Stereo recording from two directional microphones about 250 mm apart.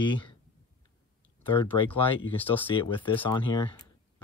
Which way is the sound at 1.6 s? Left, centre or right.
Left.